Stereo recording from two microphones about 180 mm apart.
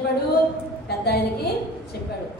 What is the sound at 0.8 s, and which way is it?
Speech, 65° left (ahead or behind).